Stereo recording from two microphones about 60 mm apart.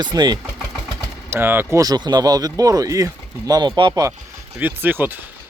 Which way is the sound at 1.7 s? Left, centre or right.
Right.